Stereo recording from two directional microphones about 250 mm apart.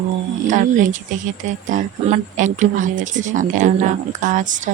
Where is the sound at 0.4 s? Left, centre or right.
Right.